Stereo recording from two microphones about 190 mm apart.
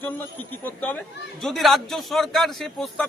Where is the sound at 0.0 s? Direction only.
10° left (ahead or behind).